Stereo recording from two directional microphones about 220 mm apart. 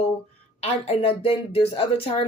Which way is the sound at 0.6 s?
25° left (ahead or behind).